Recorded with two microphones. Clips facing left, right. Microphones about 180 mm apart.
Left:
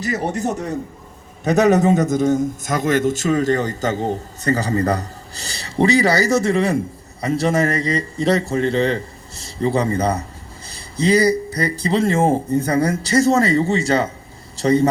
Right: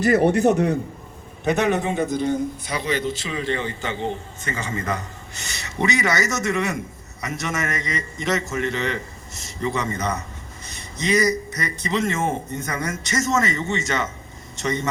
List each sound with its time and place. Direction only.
0.0 s a man's voice: 60° right (ahead or behind)
1.5 s a man's voice: 40° left (ahead or behind)